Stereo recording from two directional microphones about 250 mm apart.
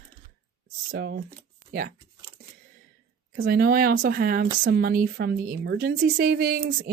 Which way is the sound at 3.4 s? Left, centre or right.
Right.